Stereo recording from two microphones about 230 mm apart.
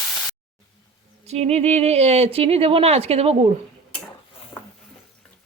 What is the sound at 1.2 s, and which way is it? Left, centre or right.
Speech, right.